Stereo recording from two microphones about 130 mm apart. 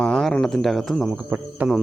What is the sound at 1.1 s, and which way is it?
Speech, 10° right (ahead or behind).